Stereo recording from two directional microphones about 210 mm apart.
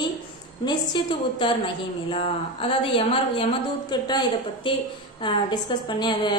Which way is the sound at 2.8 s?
25° left (ahead or behind).